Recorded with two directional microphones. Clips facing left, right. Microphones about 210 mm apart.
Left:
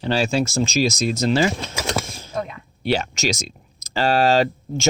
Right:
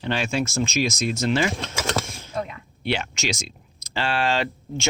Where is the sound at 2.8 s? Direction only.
40° left (ahead or behind).